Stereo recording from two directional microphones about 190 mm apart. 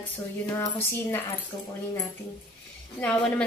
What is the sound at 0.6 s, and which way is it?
A woman's voice, 10° left (ahead or behind).